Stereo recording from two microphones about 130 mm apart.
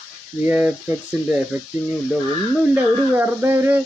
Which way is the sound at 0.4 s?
15° right (ahead or behind).